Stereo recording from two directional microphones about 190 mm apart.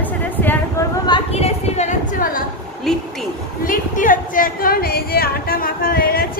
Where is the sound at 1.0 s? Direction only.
30° left (ahead or behind).